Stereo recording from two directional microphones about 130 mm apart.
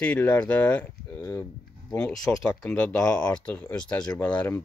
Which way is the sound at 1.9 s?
5° left (ahead or behind).